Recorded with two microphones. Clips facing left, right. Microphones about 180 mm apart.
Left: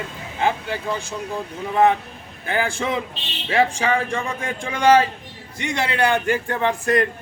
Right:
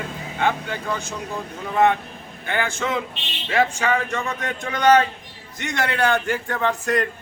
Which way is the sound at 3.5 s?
15° left (ahead or behind).